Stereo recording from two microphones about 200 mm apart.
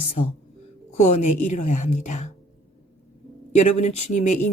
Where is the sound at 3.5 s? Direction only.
35° left (ahead or behind).